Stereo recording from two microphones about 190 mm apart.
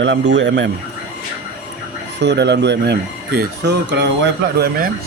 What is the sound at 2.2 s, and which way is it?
Speech, 65° right (ahead or behind).